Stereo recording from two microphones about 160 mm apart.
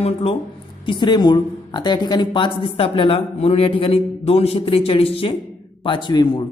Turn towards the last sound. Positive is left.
turn(degrees=30)  # may be behind; listen again after turning